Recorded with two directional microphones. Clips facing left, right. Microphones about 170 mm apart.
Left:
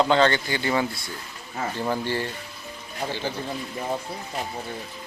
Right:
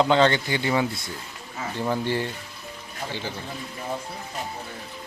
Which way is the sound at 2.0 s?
20° right (ahead or behind).